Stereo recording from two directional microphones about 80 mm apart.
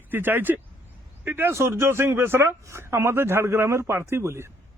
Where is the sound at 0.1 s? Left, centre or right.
Right.